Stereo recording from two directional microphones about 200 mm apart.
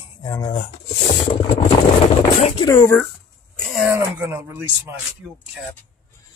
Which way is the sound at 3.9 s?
15° right (ahead or behind).